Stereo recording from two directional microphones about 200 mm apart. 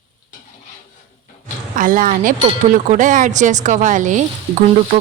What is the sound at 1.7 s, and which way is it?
Speech, 40° right (ahead or behind).